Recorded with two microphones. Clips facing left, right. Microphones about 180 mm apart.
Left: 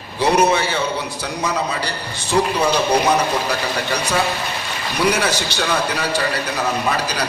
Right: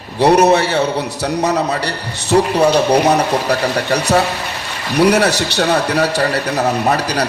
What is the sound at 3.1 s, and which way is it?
A man's voice, 65° right (ahead or behind).